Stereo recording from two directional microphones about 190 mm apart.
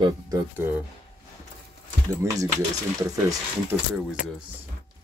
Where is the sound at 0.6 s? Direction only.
10° right (ahead or behind).